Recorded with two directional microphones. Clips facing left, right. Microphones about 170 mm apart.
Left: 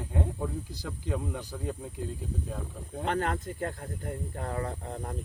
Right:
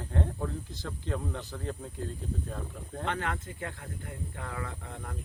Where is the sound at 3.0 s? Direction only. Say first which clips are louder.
Left 5 dB; 40° left (ahead or behind).